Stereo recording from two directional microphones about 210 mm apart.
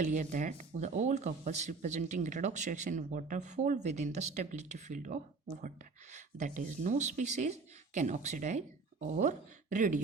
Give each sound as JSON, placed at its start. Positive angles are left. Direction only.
{"t": 0.0, "sound": "speech", "side_deg": -35}